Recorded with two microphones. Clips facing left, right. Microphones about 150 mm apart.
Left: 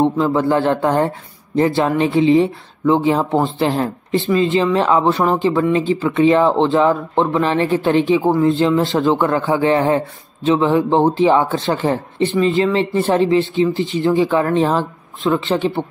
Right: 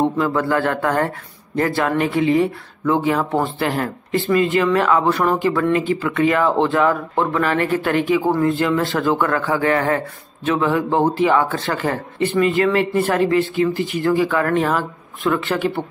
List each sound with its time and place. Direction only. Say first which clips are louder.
0.0 s speech: left 3 dB; 20° left (ahead or behind)